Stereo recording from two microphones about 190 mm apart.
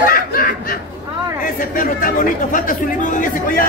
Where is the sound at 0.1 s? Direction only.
50° left (ahead or behind).